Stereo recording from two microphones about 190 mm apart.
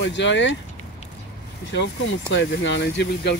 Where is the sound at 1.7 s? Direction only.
70° left (ahead or behind).